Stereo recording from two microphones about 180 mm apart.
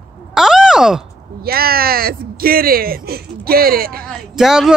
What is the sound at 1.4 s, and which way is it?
Speech, 55° right (ahead or behind).